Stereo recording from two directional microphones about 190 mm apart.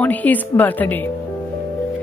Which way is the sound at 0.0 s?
10° left (ahead or behind).